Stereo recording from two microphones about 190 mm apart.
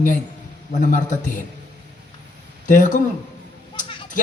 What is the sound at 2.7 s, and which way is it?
Speech, 40° left (ahead or behind).